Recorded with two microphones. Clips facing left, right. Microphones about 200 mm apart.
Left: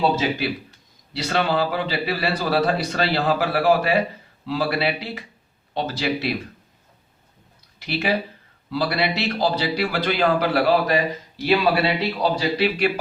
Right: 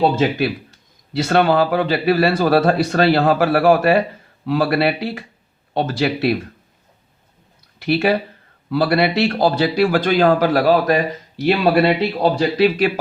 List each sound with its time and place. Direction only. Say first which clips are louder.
1.1 s speech: right 7 dB; 50° right (ahead or behind)
7.8 s speech: right 6 dB; 55° right (ahead or behind)